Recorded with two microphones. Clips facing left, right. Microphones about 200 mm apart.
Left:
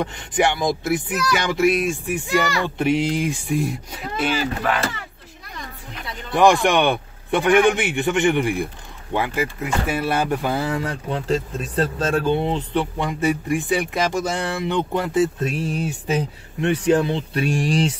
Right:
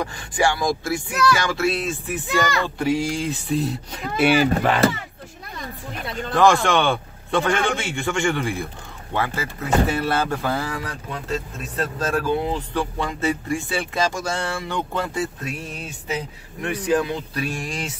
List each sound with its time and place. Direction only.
0.0 s speech: 20° left (ahead or behind)
4.2 s speech: 10° right (ahead or behind)
6.3 s speech: 15° left (ahead or behind)
16.6 s speech: 30° left (ahead or behind)